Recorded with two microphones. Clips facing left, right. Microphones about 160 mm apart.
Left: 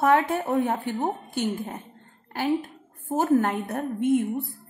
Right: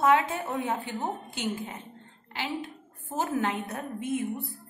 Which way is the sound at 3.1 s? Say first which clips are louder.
Left 7 dB; 45° left (ahead or behind).